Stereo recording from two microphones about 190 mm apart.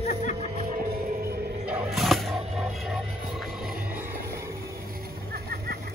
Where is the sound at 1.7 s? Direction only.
5° right (ahead or behind).